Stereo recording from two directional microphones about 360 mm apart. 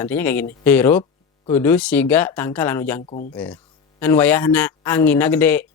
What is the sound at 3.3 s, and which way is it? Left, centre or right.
Speech, centre.